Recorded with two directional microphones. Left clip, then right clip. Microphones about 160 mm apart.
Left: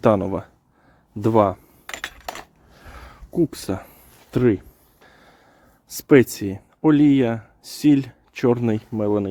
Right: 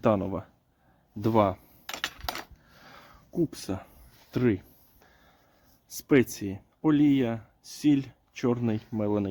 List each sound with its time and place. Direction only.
0.0 s speech: 30° left (ahead or behind)
1.9 s coin: 15° left (ahead or behind)
2.9 s a sound: 35° left (ahead or behind)
4.3 s speech: 35° left (ahead or behind)
5.9 s speech: 40° left (ahead or behind)
8.9 s speech: 25° left (ahead or behind)